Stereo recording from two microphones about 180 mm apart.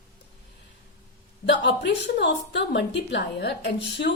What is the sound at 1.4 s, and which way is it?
A woman's voice, 75° left (ahead or behind).